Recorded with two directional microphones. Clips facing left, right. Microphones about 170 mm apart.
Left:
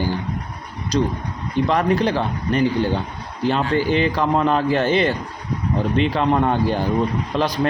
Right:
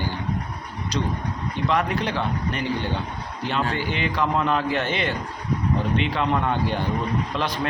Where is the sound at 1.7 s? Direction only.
35° left (ahead or behind).